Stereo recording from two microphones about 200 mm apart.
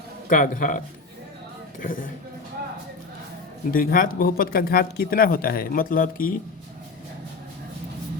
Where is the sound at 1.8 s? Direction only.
45° left (ahead or behind).